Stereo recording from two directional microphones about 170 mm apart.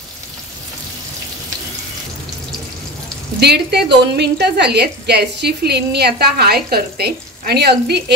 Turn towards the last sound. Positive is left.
turn(degrees=-75)  # may be behind; listen again after turning